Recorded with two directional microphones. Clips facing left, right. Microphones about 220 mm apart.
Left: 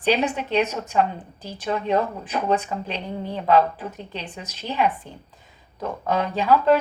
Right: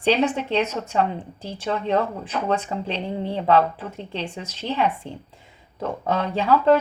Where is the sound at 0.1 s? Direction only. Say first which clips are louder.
Right 1 dB; 10° left (ahead or behind).